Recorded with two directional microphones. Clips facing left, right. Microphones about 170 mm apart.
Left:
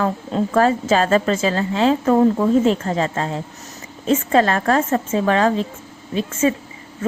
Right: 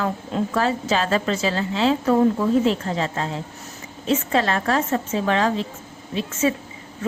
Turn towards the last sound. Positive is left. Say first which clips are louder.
# left 3 dB
turn(degrees=50)  # may be behind; listen again after turning